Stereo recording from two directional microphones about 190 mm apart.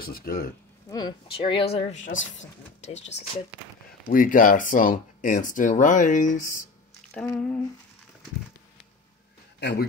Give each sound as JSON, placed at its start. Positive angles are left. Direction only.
{"t": 0.0, "sound": "speech", "side_deg": 50}
{"t": 0.8, "sound": "speech", "side_deg": 20}
{"t": 2.0, "sound": "speech", "side_deg": 85}
{"t": 2.8, "sound": "speech", "side_deg": 35}
{"t": 7.2, "sound": "speech", "side_deg": 10}
{"t": 9.6, "sound": "speech", "side_deg": 65}